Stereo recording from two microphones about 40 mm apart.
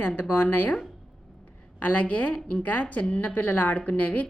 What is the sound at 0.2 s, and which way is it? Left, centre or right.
Speech, left.